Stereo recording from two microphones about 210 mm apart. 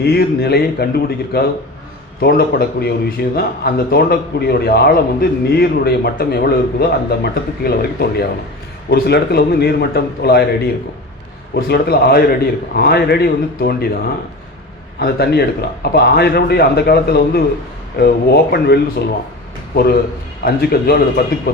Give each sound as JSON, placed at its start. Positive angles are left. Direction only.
{"t": 0.0, "sound": "speech", "side_deg": 50}
{"t": 14.9, "sound": "speech", "side_deg": 50}